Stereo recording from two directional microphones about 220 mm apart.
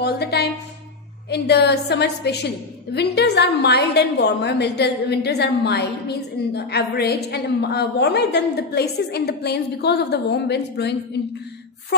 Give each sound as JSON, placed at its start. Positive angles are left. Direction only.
{"t": 0.0, "sound": "a woman's voice", "side_deg": 50}